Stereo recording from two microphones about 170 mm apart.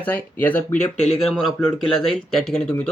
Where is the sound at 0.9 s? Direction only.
40° left (ahead or behind).